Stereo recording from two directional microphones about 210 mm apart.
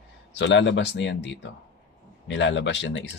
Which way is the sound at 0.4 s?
60° left (ahead or behind).